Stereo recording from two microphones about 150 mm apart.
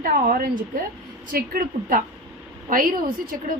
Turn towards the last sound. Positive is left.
turn(degrees=-70)  # may be behind; listen again after turning